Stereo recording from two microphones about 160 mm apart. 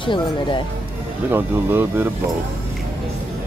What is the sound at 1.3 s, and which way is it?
Speech, 15° right (ahead or behind).